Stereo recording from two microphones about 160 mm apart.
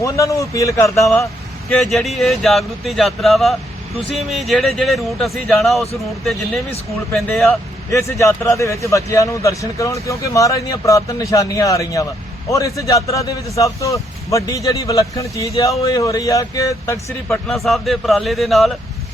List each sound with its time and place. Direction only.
0.0 s speech: 20° left (ahead or behind)
1.8 s speech: centre (ahead or behind)
7.2 s speech: centre (ahead or behind)
7.9 s speech: 20° left (ahead or behind)
17.3 s speech: centre (ahead or behind)